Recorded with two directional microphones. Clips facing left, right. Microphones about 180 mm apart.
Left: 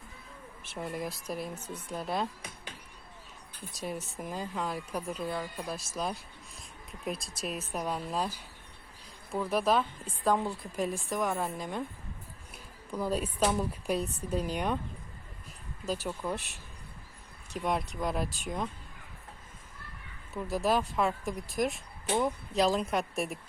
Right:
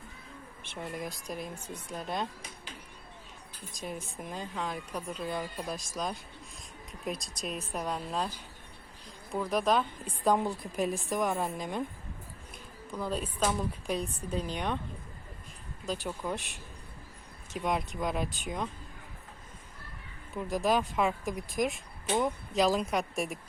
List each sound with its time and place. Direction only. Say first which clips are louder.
0.6 s speech: left 2 dB; 5° left (ahead or behind)
3.7 s speech: left 2 dB; 5° left (ahead or behind)
10.2 s speech: right 1 dB; 15° right (ahead or behind)
11.5 s speech: right 1 dB; 15° right (ahead or behind)
12.9 s speech: left 3 dB; 10° left (ahead or behind)
16.2 s speech: even; 10° left (ahead or behind)
17.5 s speech: even; centre (ahead or behind)
20.6 s speech: even; centre (ahead or behind)